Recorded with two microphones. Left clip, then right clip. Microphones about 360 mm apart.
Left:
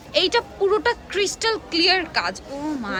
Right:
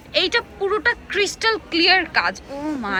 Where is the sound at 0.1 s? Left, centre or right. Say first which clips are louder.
Even; centre.